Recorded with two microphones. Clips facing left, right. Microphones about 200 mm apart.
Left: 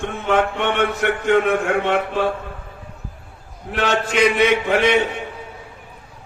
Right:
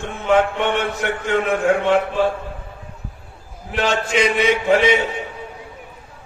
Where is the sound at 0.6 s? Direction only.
60° left (ahead or behind).